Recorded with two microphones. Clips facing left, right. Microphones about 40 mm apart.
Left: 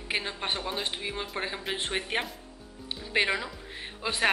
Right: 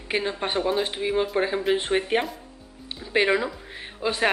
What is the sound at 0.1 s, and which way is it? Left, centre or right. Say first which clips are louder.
Speech: right 6 dB; centre.